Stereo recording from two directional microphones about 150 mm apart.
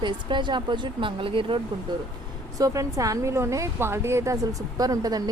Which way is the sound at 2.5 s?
20° right (ahead or behind).